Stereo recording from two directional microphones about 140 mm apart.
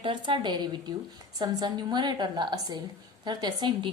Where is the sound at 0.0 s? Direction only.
35° right (ahead or behind).